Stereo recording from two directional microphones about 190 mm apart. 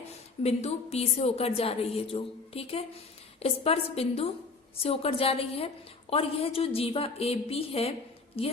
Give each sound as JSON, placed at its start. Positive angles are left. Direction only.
{"t": 0.4, "sound": "a woman's voice", "side_deg": 35}